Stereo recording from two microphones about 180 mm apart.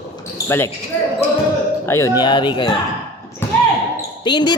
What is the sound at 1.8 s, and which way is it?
Speech, 15° left (ahead or behind).